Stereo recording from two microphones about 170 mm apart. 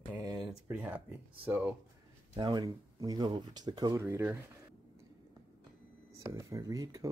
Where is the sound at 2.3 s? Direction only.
25° right (ahead or behind).